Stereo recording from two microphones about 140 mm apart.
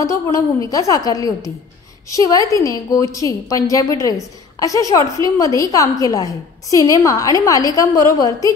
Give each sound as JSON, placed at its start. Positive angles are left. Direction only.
{"t": 0.0, "sound": "a woman's voice", "side_deg": 25}